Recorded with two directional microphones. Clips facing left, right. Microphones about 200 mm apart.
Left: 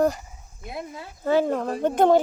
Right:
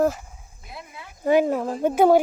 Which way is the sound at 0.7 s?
40° left (ahead or behind).